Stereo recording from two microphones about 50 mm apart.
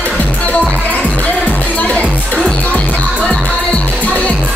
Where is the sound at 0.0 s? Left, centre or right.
Left.